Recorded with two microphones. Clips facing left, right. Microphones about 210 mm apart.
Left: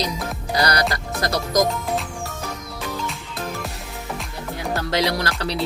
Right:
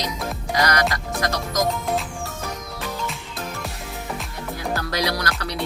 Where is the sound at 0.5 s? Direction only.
35° left (ahead or behind).